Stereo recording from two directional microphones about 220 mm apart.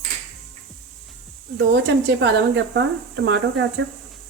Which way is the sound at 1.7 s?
55° right (ahead or behind).